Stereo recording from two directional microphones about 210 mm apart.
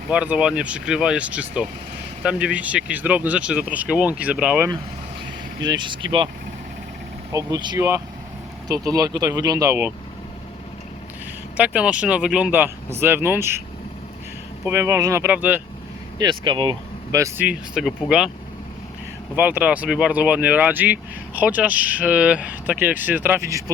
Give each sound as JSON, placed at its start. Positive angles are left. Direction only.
{"t": 0.1, "sound": "speech", "side_deg": -5}
{"t": 5.5, "sound": "speech", "side_deg": -20}
{"t": 7.3, "sound": "speech", "side_deg": -20}
{"t": 11.5, "sound": "speech", "side_deg": -5}
{"t": 14.6, "sound": "speech", "side_deg": -10}
{"t": 16.1, "sound": "speech", "side_deg": -20}
{"t": 19.4, "sound": "speech", "side_deg": -10}